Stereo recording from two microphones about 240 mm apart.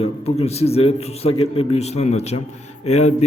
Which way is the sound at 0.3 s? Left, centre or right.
Left.